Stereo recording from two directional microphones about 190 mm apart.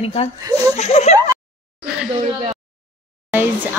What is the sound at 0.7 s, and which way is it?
Speech, 35° left (ahead or behind).